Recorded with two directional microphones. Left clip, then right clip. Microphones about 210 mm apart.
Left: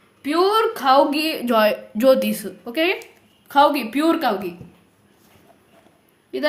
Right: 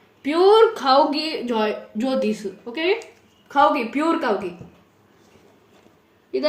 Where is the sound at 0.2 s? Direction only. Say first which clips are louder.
Right 3 dB; 35° left (ahead or behind); by 4.3 s 60° left (ahead or behind).